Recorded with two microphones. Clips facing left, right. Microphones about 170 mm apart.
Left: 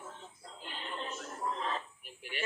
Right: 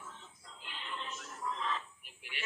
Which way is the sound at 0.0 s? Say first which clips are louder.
Left 4 dB; 45° left (ahead or behind).